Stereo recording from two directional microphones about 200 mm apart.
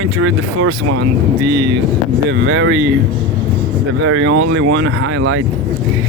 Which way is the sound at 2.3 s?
70° right (ahead or behind).